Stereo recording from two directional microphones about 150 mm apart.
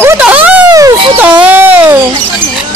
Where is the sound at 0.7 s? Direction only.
25° right (ahead or behind).